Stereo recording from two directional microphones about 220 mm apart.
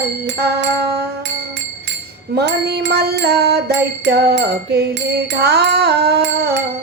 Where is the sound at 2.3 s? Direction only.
50° right (ahead or behind).